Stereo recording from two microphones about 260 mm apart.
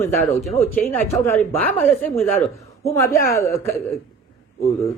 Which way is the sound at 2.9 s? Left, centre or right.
Centre.